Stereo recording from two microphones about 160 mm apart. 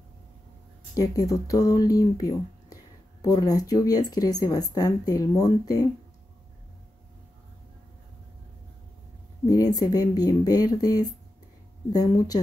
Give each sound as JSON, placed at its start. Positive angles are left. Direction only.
{"t": 0.9, "sound": "speech", "side_deg": 20}
{"t": 9.5, "sound": "speech", "side_deg": 25}